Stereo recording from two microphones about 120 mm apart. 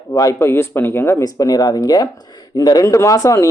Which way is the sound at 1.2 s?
30° left (ahead or behind).